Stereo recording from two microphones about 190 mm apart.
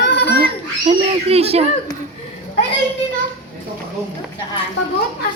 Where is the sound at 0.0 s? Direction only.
60° left (ahead or behind).